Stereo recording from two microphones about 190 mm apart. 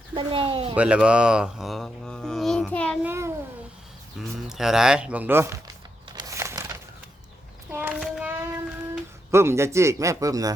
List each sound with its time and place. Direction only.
0.1 s speech: 25° right (ahead or behind)
0.8 s speech: 5° right (ahead or behind)
3.0 s cat: 10° right (ahead or behind)
4.2 s speech: centre (ahead or behind)
6.1 s a sound: 20° right (ahead or behind)
8.0 s child singing: centre (ahead or behind)
8.3 s music: 10° right (ahead or behind)
9.3 s a man's voice: 15° right (ahead or behind)